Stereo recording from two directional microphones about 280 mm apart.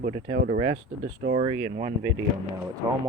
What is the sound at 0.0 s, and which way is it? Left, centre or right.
Speech, right.